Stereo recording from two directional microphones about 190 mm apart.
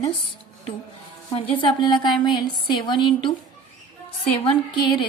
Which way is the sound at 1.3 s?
30° left (ahead or behind).